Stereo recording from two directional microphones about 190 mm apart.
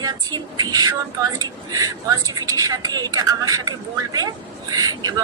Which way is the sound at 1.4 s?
20° right (ahead or behind).